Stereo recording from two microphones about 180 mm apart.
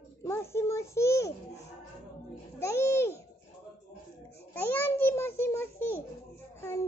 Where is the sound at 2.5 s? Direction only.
15° left (ahead or behind).